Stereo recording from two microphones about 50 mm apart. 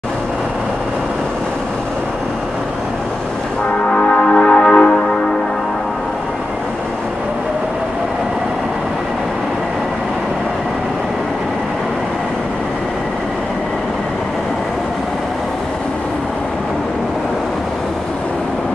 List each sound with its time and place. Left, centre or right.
3.8 s music: centre